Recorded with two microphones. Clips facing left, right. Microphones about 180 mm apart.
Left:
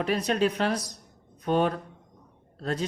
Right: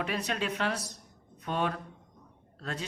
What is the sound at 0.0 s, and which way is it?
Speech, 40° left (ahead or behind).